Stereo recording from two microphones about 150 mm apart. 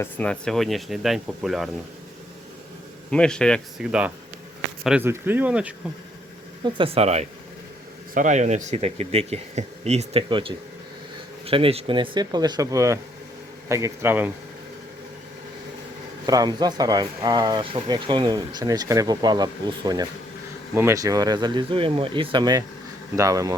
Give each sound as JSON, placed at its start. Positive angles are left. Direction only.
{"t": 0.0, "sound": "speech", "side_deg": 10}
{"t": 3.1, "sound": "speech", "side_deg": 5}
{"t": 6.7, "sound": "speech", "side_deg": -40}
{"t": 8.1, "sound": "speech", "side_deg": -55}
{"t": 16.2, "sound": "speech", "side_deg": -25}